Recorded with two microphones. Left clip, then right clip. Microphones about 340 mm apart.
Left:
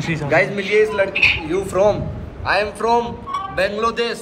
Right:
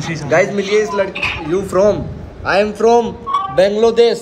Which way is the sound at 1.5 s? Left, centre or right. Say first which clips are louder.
Right 3 dB; right.